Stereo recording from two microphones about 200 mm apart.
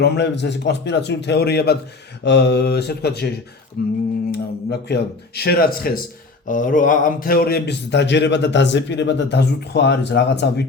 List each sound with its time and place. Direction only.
0.0 s a man's voice: 60° left (ahead or behind)